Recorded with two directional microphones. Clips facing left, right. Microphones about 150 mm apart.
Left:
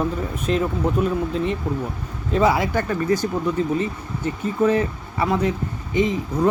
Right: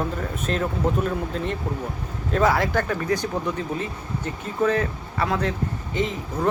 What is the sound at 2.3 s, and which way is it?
Speech, 10° left (ahead or behind).